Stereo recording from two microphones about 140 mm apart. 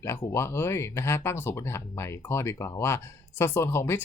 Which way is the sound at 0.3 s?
20° left (ahead or behind).